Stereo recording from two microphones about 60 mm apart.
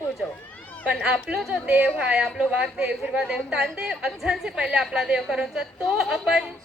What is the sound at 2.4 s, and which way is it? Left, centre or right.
Speech, centre.